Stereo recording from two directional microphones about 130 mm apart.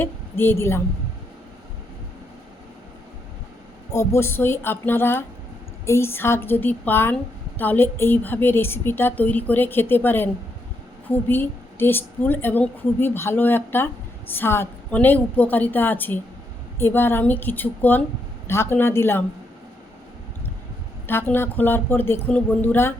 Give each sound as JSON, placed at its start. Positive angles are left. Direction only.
{"t": 0.0, "sound": "speech", "side_deg": 15}
{"t": 3.9, "sound": "a woman's voice", "side_deg": 20}
{"t": 21.1, "sound": "a woman's voice", "side_deg": 15}